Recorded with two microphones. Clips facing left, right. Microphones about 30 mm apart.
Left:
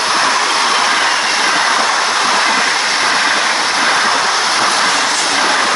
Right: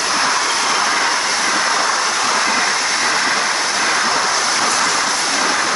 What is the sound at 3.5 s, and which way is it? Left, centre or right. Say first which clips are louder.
Vehicle: left 4 dB; left.